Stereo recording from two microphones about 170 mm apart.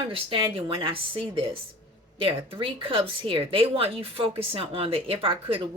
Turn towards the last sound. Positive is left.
turn(degrees=-30)  # may be behind; listen again after turning